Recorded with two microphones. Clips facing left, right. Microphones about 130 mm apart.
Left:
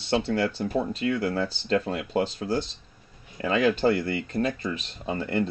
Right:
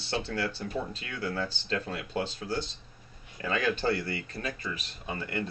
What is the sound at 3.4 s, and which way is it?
Speech, 25° left (ahead or behind).